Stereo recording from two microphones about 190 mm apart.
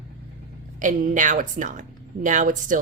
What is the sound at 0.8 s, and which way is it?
A woman's voice, 45° right (ahead or behind).